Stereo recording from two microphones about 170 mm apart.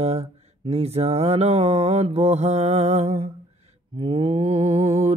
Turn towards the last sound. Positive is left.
turn(degrees=-35)  # may be behind; listen again after turning